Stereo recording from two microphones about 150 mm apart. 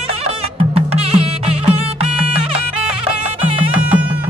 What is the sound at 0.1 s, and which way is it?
Music, 40° right (ahead or behind).